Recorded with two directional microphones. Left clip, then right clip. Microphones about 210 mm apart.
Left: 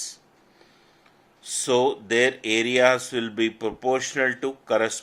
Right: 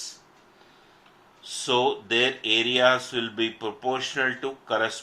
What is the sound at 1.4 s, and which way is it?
Speech, 50° left (ahead or behind).